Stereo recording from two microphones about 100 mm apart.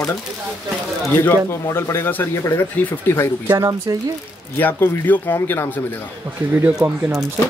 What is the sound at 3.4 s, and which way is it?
Speech, 35° right (ahead or behind).